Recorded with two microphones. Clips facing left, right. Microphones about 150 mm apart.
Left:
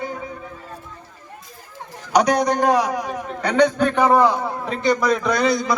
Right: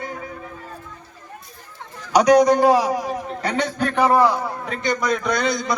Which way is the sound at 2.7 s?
40° right (ahead or behind).